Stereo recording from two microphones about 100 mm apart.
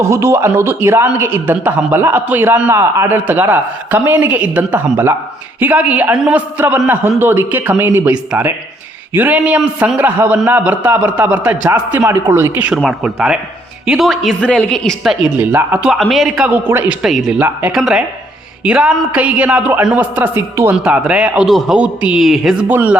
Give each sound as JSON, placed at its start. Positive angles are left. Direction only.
{"t": 0.1, "sound": "a man's voice", "side_deg": -25}
{"t": 3.2, "sound": "a man's voice", "side_deg": -20}
{"t": 8.1, "sound": "a man's voice", "side_deg": -10}
{"t": 15.4, "sound": "a man's voice", "side_deg": -15}
{"t": 15.9, "sound": "speech", "side_deg": 0}
{"t": 16.4, "sound": "a man's voice", "side_deg": -20}
{"t": 17.0, "sound": "speech", "side_deg": -5}
{"t": 17.3, "sound": "a man's voice", "side_deg": -15}
{"t": 17.7, "sound": "a man's voice", "side_deg": -5}
{"t": 22.7, "sound": "a man's voice", "side_deg": -15}